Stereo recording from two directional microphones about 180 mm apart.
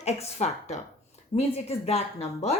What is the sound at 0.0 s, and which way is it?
Speech, 40° left (ahead or behind).